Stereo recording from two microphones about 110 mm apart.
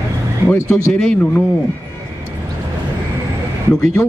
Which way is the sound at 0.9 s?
10° left (ahead or behind).